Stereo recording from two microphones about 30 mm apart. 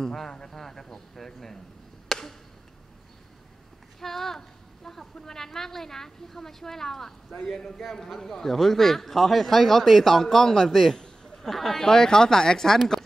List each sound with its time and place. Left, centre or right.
0.0 s a man's voice: centre
2.0 s chop: centre
4.0 s a man's voice: centre
8.2 s a man's voice: centre
11.3 s speech: centre
11.8 s speech: centre